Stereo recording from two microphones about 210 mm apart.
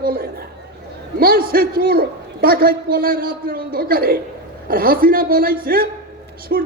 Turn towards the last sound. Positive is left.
turn(degrees=-45)  # may be behind; listen again after turning